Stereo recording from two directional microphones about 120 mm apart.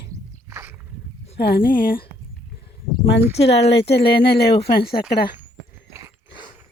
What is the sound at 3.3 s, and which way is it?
Speech, 60° left (ahead or behind).